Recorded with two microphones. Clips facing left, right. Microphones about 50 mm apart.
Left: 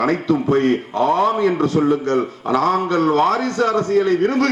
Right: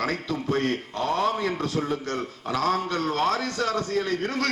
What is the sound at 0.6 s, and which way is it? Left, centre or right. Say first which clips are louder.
A man's voice: left 10 dB; centre.